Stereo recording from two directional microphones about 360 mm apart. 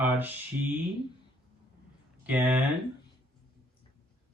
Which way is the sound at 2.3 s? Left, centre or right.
Centre.